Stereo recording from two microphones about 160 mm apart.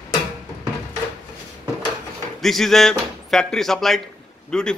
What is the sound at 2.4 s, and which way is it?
A man's voice, centre (ahead or behind).